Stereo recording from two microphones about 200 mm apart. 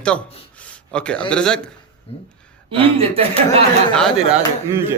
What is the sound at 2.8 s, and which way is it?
Speech, 30° right (ahead or behind).